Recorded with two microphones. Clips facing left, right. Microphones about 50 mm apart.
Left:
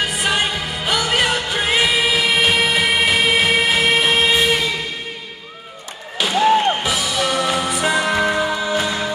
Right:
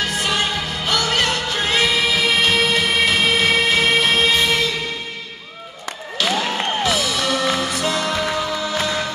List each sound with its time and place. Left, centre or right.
0.0 s music: centre
6.1 s music: centre